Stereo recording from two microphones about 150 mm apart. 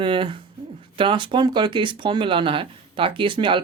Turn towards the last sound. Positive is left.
turn(degrees=-35)  # may be behind; listen again after turning